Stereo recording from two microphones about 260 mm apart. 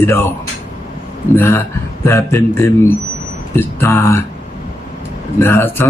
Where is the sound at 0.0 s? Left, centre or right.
Centre.